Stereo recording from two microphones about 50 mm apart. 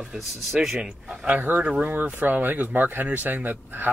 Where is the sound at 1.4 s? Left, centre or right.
Right.